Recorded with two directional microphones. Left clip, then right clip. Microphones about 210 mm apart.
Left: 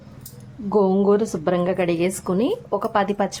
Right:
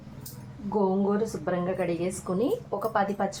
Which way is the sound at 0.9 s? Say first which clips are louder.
Left 8 dB; 55° left (ahead or behind).